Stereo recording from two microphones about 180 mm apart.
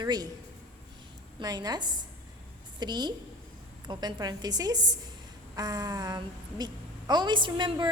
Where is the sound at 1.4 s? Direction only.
20° right (ahead or behind).